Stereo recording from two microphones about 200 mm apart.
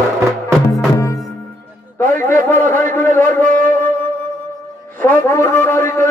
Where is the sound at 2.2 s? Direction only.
10° left (ahead or behind).